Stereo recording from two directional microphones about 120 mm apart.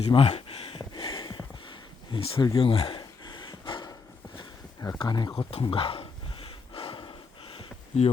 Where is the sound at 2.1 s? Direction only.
45° left (ahead or behind).